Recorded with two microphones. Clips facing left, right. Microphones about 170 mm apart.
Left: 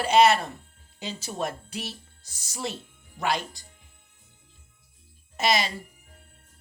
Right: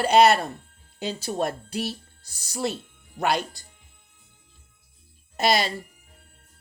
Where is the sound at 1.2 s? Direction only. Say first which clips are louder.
Right 4 dB; 35° right (ahead or behind).